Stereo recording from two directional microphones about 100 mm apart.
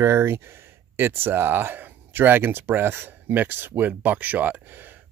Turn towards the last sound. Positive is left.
turn(degrees=-20)  # may be behind; listen again after turning